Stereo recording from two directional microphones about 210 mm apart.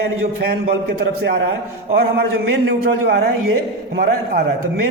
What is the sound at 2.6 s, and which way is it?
Speech, 50° right (ahead or behind).